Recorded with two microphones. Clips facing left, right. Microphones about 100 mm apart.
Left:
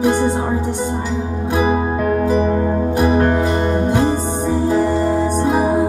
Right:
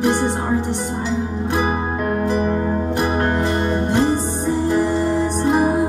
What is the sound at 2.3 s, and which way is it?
Music, 25° left (ahead or behind).